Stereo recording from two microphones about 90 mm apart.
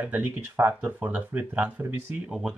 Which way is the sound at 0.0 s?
20° right (ahead or behind).